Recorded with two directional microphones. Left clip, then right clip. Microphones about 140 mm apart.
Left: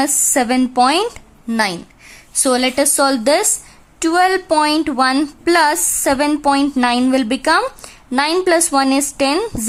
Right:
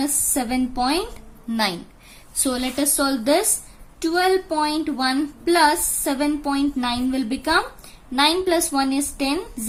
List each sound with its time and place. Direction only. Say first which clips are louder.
0.0 s a woman's voice: left 9 dB; 65° left (ahead or behind)
1.5 s a woman's voice: left 5 dB; 45° left (ahead or behind)
2.4 s a woman's voice: left 9 dB; 65° left (ahead or behind)